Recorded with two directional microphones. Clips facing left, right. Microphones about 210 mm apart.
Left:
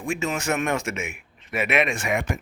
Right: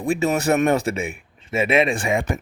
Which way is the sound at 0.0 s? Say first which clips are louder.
Right 6 dB; 35° right (ahead or behind).